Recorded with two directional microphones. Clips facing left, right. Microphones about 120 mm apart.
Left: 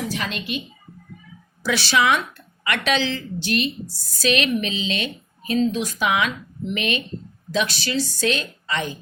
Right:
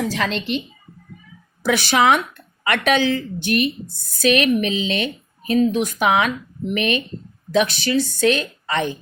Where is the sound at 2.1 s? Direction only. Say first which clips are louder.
Right 3 dB; 55° right (ahead or behind).